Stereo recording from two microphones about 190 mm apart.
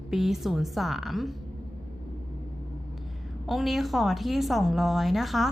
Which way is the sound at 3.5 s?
Centre (ahead or behind).